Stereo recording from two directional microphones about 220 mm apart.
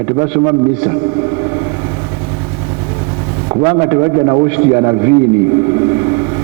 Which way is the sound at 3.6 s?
25° right (ahead or behind).